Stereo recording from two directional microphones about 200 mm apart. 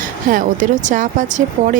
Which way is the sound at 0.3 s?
45° right (ahead or behind).